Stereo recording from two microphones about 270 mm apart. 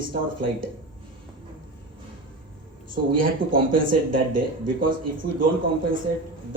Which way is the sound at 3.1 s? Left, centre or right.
Right.